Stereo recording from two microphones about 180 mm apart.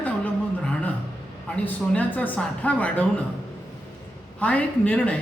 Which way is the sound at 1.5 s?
5° left (ahead or behind).